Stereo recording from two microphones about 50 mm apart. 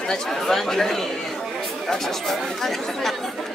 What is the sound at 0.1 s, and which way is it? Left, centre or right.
Speech, centre.